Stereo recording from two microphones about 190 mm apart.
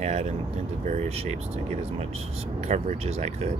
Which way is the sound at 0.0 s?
35° right (ahead or behind).